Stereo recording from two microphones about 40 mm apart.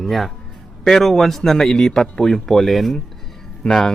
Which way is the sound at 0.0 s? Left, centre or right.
Centre.